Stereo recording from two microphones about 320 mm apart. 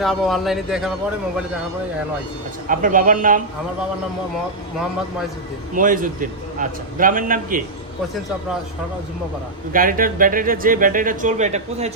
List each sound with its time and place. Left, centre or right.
0.0 s speech: centre
2.6 s speech: right
5.7 s speech: right
9.7 s speech: right